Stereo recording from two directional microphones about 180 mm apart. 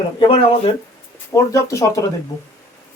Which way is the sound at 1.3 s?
15° left (ahead or behind).